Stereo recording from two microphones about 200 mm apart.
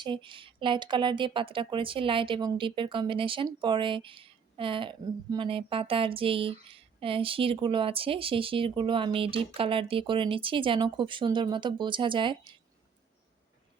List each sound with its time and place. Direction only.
0.0 s speech: 25° right (ahead or behind)